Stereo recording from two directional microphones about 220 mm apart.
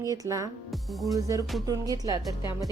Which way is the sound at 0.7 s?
Centre (ahead or behind).